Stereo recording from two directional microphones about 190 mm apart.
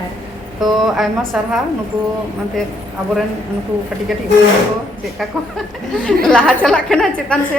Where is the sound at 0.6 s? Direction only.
Centre (ahead or behind).